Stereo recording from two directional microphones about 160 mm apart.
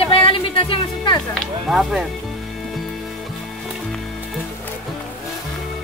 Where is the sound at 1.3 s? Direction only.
Centre (ahead or behind).